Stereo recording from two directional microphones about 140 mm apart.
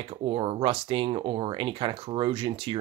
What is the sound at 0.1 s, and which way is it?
Speech, 40° right (ahead or behind).